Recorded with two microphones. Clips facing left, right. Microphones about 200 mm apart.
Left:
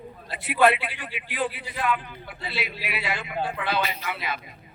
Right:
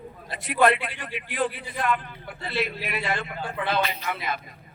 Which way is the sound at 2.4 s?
45° right (ahead or behind).